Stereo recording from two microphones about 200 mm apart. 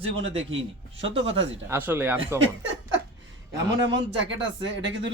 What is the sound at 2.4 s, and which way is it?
Chuckle, 70° right (ahead or behind).